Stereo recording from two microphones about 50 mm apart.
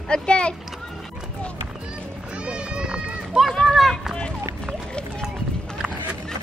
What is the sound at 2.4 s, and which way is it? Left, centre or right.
Children playing, right.